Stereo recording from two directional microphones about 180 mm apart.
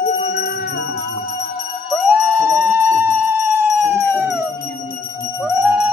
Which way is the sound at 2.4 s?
15° right (ahead or behind).